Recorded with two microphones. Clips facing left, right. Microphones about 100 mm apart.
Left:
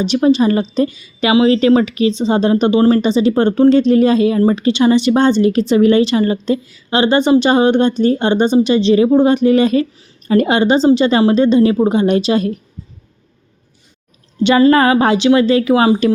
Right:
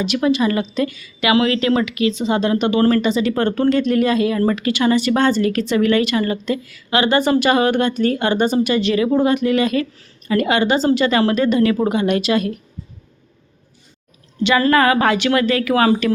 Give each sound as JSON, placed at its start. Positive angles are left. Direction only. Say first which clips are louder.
{"t": 0.0, "sound": "a woman's voice", "louder": "left 5 dB", "side_deg": 30}
{"t": 14.6, "sound": "speech", "louder": "left 4 dB", "side_deg": 25}